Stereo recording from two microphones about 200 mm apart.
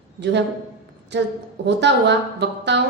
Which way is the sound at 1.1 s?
60° right (ahead or behind).